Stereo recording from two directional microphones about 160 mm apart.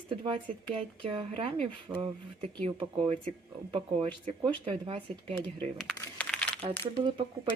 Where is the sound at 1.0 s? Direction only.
35° right (ahead or behind).